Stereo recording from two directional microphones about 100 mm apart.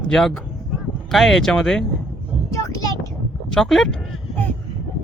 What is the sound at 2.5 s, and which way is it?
Vehicle, 35° left (ahead or behind).